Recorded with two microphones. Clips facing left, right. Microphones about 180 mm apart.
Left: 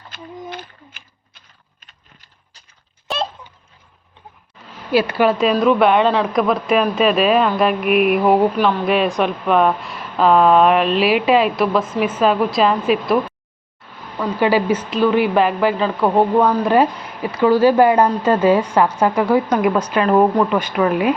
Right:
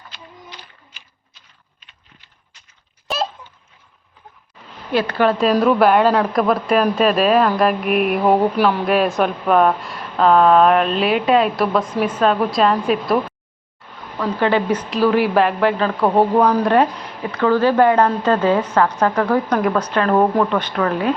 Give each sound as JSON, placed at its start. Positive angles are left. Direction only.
{"t": 0.1, "sound": "a sound", "side_deg": 55}
{"t": 4.9, "sound": "a woman's voice", "side_deg": 10}
{"t": 14.2, "sound": "a woman's voice", "side_deg": 10}